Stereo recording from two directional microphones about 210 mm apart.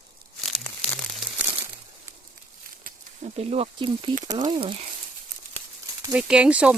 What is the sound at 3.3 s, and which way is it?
Speech, 30° right (ahead or behind).